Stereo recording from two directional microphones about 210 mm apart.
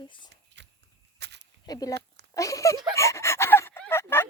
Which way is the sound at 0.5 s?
55° right (ahead or behind).